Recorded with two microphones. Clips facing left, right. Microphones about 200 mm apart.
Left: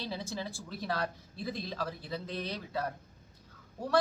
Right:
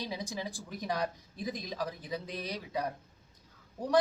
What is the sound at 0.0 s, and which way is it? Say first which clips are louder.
A man's voice: even; 15° right (ahead or behind).